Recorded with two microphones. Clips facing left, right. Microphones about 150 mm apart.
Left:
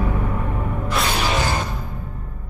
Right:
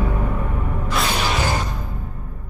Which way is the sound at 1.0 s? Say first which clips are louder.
Even; centre (ahead or behind).